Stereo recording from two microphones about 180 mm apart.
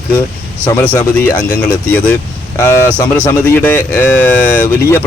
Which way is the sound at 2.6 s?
15° left (ahead or behind).